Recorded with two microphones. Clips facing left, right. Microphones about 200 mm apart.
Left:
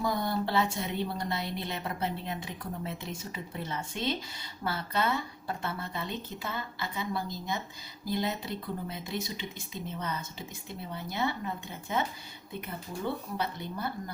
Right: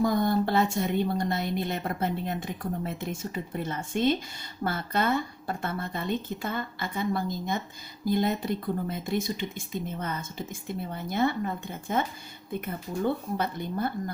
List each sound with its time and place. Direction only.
0.0 s a woman's voice: 50° right (ahead or behind)
13.3 s a woman's voice: 50° right (ahead or behind)